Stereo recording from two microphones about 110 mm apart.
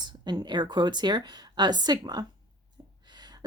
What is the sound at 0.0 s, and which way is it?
Speech, 40° right (ahead or behind).